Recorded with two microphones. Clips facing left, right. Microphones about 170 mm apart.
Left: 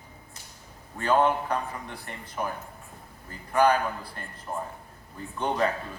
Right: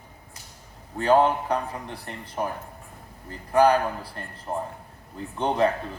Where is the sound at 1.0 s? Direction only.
35° right (ahead or behind).